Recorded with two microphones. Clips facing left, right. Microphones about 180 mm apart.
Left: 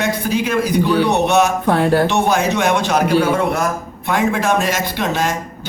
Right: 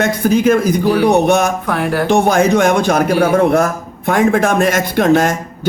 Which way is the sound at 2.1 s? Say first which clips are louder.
Right 5 dB; 50° right (ahead or behind).